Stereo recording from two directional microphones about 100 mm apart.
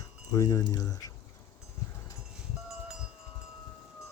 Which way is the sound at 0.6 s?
40° left (ahead or behind).